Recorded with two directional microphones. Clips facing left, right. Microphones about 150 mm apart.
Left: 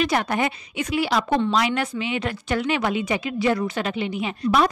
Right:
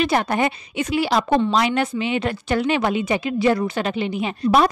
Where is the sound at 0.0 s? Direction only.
30° right (ahead or behind).